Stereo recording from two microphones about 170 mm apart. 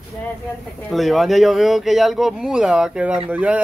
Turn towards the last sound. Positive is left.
turn(degrees=-10)  # may be behind; listen again after turning